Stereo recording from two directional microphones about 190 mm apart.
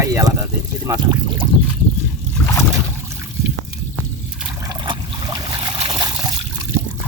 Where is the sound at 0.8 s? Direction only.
20° right (ahead or behind).